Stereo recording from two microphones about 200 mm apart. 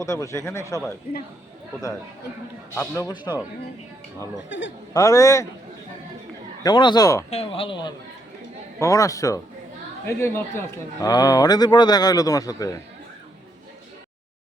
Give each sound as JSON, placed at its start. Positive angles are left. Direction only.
{"t": 0.0, "sound": "speech", "side_deg": 15}
{"t": 2.7, "sound": "speech", "side_deg": 15}
{"t": 4.4, "sound": "speech", "side_deg": 65}
{"t": 4.9, "sound": "speech", "side_deg": 15}
{"t": 6.6, "sound": "speech", "side_deg": 20}
{"t": 7.3, "sound": "speech", "side_deg": 30}